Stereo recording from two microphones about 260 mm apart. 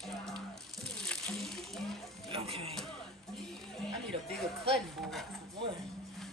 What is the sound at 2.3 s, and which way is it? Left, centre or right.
Music, right.